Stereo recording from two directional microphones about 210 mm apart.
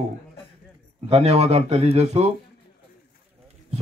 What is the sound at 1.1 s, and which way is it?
Speech, 30° right (ahead or behind).